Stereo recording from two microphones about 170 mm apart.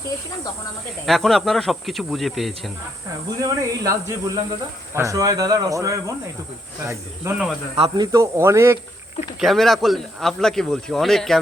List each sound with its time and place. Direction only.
1.0 s speech: centre (ahead or behind)
3.4 s speech: 20° right (ahead or behind)
9.4 s speech: centre (ahead or behind)